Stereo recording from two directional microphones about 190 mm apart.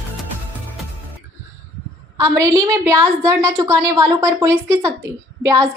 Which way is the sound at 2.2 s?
15° right (ahead or behind).